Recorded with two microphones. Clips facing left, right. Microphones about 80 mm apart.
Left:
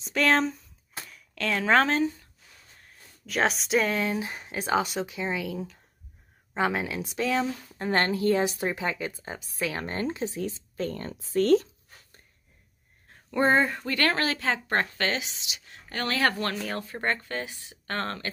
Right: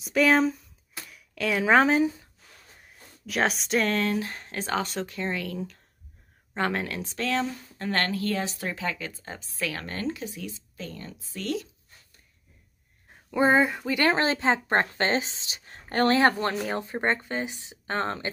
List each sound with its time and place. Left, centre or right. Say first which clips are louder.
0.0 s speech: right 3 dB; centre
2.8 s speech: right 6 dB; centre
7.9 s a woman's voice: left 4 dB; left
10.8 s speech: left 8 dB; left
13.1 s a woman's voice: right 1 dB; centre